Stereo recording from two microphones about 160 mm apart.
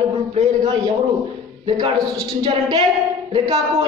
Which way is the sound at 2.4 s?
25° right (ahead or behind).